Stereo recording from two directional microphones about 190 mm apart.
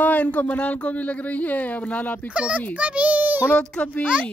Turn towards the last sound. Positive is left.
turn(degrees=5)  # may be behind; listen again after turning